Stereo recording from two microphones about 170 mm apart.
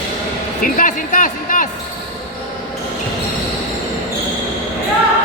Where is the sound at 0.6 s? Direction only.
55° left (ahead or behind).